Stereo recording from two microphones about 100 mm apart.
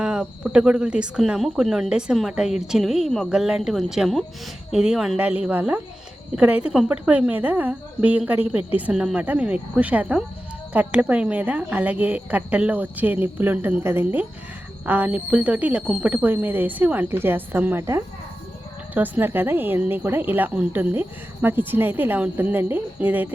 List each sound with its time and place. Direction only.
0.0 s a woman's voice: 10° right (ahead or behind)
18.9 s speech: 15° right (ahead or behind)